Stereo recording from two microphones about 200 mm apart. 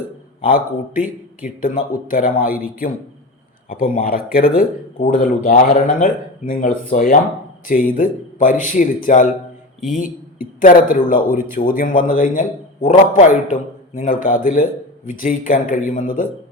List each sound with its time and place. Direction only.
0.4 s speech: 45° left (ahead or behind)
3.7 s a man's voice: 45° left (ahead or behind)
10.6 s a man's voice: 45° left (ahead or behind)